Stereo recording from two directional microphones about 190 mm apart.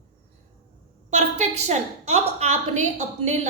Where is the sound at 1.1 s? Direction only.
35° right (ahead or behind).